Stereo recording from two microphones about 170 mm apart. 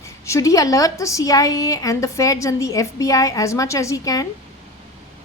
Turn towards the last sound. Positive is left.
turn(degrees=20)  # may be behind; listen again after turning